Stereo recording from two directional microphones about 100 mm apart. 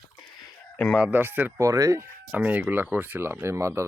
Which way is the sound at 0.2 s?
40° left (ahead or behind).